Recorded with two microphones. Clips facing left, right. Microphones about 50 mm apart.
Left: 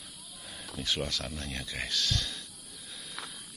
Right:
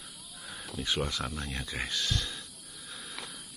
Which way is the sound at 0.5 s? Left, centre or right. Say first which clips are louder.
Right 1 dB; centre.